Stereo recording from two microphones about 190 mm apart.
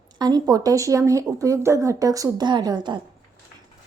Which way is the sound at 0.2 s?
20° right (ahead or behind).